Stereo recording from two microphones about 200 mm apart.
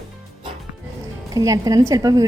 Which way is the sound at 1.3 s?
15° right (ahead or behind).